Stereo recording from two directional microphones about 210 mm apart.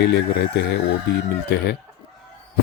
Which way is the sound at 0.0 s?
55° left (ahead or behind).